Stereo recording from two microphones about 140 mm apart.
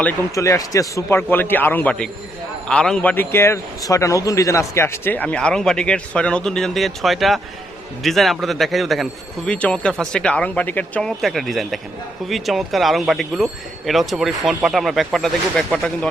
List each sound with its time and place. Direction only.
0.3 s a man's voice: 20° left (ahead or behind); by 15.9 s 5° left (ahead or behind)